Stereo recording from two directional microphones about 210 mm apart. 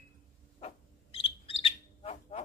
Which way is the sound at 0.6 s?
30° left (ahead or behind).